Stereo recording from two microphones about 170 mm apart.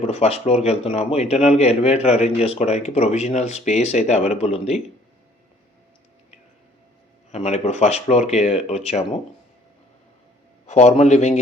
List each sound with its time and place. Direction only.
0.0 s a man's voice: 40° left (ahead or behind)
7.3 s a man's voice: 40° left (ahead or behind)
10.7 s a man's voice: 40° left (ahead or behind)